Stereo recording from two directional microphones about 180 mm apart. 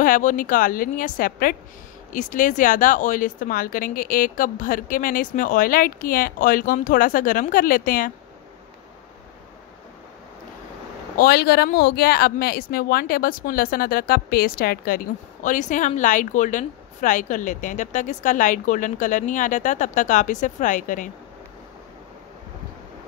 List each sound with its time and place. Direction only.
0.0 s speech: 45° left (ahead or behind)
11.1 s speech: 60° left (ahead or behind)
15.4 s speech: 45° left (ahead or behind)